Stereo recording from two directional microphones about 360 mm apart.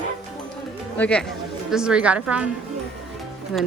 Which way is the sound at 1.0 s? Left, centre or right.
Centre.